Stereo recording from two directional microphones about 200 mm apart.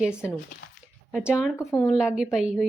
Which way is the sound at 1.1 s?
Centre (ahead or behind).